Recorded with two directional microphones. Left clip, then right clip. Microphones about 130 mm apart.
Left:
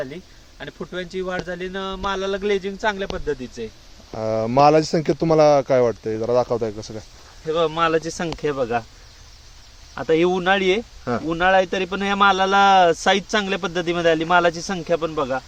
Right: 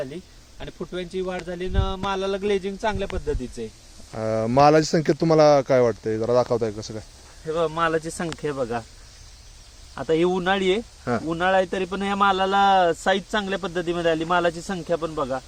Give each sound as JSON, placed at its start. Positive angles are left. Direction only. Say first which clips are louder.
{"t": 0.6, "sound": "speech", "louder": "left 2 dB", "side_deg": -5}
{"t": 7.4, "sound": "speech", "louder": "left 3 dB", "side_deg": 45}
{"t": 9.9, "sound": "speech", "louder": "left 3 dB", "side_deg": 25}
{"t": 10.2, "sound": "speech", "louder": "left 3 dB", "side_deg": 15}